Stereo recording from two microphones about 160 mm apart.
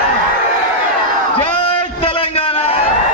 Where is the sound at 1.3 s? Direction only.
35° left (ahead or behind).